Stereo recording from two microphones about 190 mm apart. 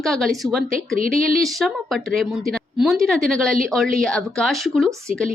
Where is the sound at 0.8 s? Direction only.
45° right (ahead or behind).